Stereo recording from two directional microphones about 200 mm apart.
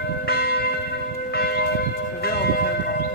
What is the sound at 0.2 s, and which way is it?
Church bell, 50° left (ahead or behind).